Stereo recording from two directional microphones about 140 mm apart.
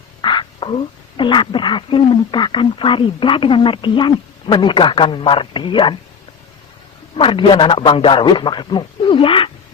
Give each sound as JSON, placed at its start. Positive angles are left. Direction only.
{"t": 0.2, "sound": "a sound", "side_deg": 35}
{"t": 1.1, "sound": "speech", "side_deg": 35}
{"t": 7.2, "sound": "speech", "side_deg": 40}